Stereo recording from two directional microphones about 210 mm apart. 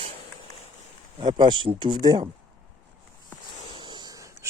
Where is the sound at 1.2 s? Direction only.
20° right (ahead or behind).